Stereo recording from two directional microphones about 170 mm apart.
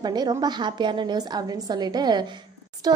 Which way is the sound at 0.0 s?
25° right (ahead or behind).